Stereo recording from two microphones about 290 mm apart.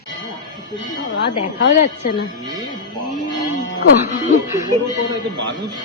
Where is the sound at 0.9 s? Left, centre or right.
Left.